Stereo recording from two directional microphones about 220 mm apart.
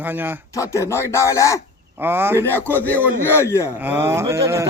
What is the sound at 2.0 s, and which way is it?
Speech, 10° right (ahead or behind).